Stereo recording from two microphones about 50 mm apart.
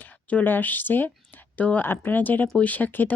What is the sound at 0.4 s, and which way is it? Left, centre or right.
Speech, left.